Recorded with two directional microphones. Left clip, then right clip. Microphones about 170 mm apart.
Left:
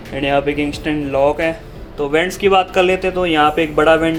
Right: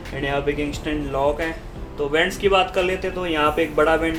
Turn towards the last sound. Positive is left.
turn(degrees=35)  # may be behind; listen again after turning